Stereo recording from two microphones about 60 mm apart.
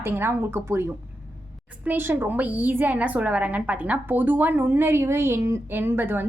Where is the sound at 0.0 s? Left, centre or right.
Right.